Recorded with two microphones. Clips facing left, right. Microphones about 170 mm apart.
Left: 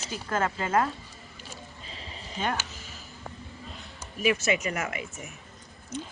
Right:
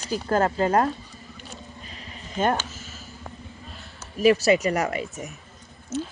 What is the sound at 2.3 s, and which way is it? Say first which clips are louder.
Speech: right 8 dB; 50° right (ahead or behind).